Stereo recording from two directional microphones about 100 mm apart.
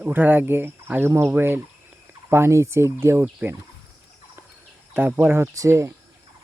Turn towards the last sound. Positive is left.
turn(degrees=-30)  # may be behind; listen again after turning